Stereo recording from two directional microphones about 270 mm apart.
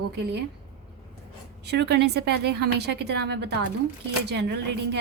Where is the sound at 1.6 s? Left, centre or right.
Right.